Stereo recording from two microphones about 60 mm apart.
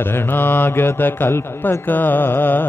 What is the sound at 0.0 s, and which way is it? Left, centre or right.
Speech, left.